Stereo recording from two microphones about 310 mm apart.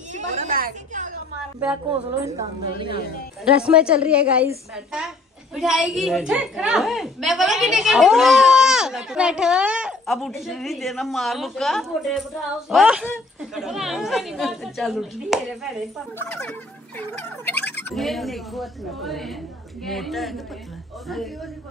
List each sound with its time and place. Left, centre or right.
0.1 s a sound: right
2.3 s a woman's voice: centre
3.6 s a woman's voice: centre